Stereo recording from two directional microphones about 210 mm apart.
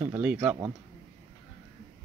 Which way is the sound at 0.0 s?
10° right (ahead or behind).